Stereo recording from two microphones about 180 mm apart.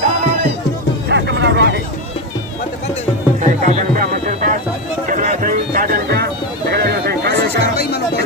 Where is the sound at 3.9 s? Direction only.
50° right (ahead or behind).